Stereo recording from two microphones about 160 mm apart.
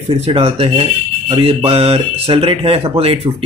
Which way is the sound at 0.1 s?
40° right (ahead or behind).